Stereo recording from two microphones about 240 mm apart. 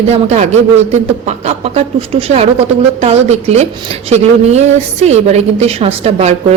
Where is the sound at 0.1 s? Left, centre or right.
Right.